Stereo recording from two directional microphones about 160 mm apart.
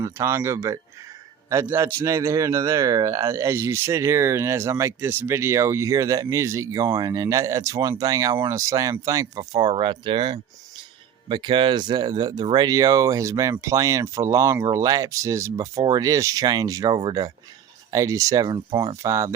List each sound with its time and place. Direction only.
0.0 s speech: 20° right (ahead or behind)